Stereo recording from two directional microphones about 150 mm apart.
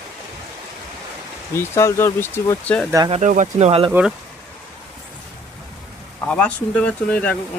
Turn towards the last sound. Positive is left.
turn(degrees=10)  # may be behind; listen again after turning